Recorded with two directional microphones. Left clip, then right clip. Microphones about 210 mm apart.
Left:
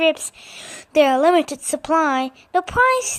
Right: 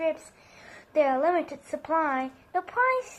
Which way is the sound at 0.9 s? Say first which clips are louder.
Left 9 dB; 65° left (ahead or behind).